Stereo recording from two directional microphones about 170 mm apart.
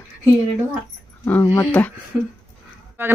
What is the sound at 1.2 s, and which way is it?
Speech, 15° left (ahead or behind).